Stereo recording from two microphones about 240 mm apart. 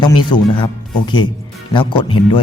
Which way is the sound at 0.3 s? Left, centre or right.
Centre.